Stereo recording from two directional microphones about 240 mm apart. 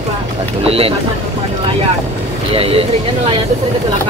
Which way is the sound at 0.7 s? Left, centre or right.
Right.